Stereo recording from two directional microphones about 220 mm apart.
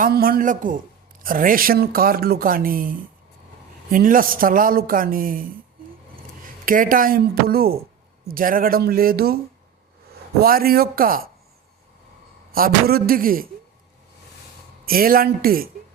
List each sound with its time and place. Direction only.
0.0 s a woman's voice: 40° right (ahead or behind)
10.4 s speech: 40° right (ahead or behind)
12.5 s a woman's voice: 40° right (ahead or behind)
14.8 s speech: 40° right (ahead or behind)